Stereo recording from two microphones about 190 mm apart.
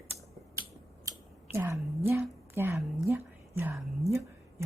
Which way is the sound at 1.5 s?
15° right (ahead or behind).